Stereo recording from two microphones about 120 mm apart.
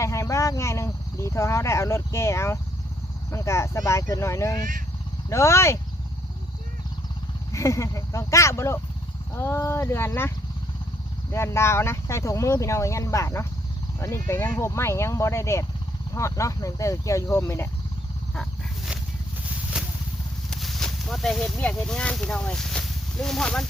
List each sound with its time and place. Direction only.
0.0 s speech: 25° left (ahead or behind)
7.5 s speech: 25° left (ahead or behind)
20.5 s speech: centre (ahead or behind)